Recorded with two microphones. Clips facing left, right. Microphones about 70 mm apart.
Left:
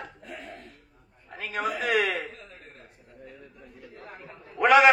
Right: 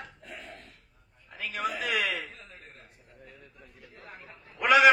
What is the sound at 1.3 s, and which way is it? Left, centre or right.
Speech, left.